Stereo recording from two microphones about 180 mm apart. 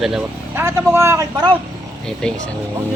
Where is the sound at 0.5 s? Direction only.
15° right (ahead or behind).